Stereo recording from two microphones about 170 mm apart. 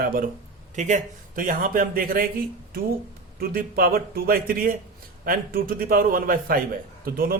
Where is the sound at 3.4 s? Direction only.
60° right (ahead or behind).